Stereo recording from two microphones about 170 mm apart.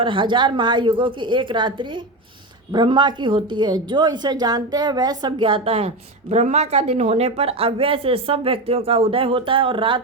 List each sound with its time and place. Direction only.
0.0 s a woman's voice: 30° right (ahead or behind)